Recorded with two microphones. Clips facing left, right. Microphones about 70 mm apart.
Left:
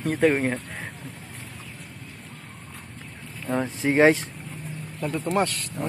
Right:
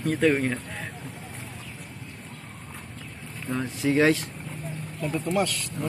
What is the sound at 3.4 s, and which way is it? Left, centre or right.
A man's voice, left.